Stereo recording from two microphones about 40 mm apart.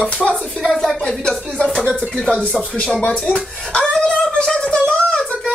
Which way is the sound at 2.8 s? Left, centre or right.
Left.